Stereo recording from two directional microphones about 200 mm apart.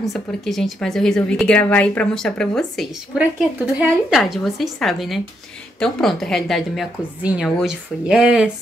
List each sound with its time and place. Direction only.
0.1 s speech: centre (ahead or behind)